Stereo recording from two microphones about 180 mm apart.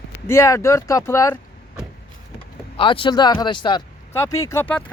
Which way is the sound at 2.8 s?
30° left (ahead or behind).